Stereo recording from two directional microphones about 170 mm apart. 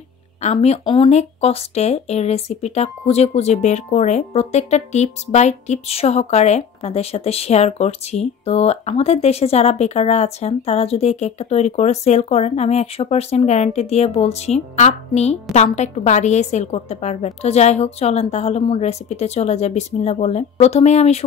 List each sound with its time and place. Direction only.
0.4 s speech: 40° left (ahead or behind)